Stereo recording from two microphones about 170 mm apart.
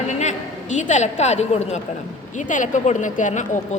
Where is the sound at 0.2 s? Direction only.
45° left (ahead or behind).